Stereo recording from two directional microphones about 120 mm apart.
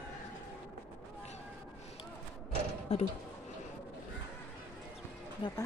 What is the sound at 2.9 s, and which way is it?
Speech, 55° left (ahead or behind).